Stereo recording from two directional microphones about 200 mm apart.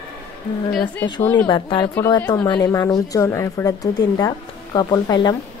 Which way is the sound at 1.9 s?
10° left (ahead or behind).